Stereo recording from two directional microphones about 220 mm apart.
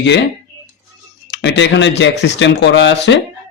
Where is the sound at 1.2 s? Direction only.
55° left (ahead or behind).